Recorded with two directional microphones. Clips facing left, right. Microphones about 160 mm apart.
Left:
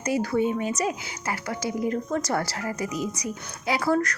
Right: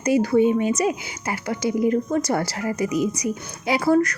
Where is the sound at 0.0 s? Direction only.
20° right (ahead or behind).